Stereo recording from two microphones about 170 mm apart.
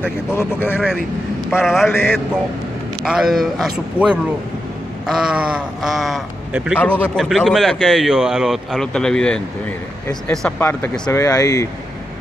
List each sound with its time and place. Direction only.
0.3 s speech: 10° left (ahead or behind)
1.6 s a man's voice: centre (ahead or behind)
3.0 s a man's voice: centre (ahead or behind)
6.8 s a man's voice: 10° left (ahead or behind)
10.7 s speech: 15° left (ahead or behind)